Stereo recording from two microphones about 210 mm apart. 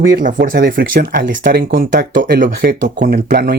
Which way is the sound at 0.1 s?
40° right (ahead or behind).